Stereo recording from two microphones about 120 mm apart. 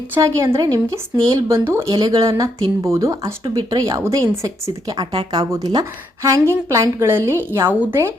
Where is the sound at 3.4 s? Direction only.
35° right (ahead or behind).